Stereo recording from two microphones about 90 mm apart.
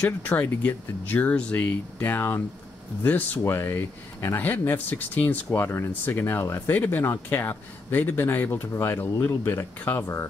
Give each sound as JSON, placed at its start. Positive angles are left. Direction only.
{"t": 0.0, "sound": "speech", "side_deg": 20}